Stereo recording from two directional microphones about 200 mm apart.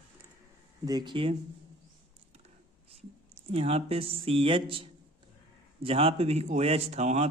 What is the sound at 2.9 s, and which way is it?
Speech, 30° right (ahead or behind).